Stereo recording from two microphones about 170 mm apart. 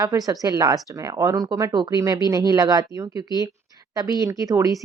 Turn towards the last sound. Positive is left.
turn(degrees=-20)  # may be behind; listen again after turning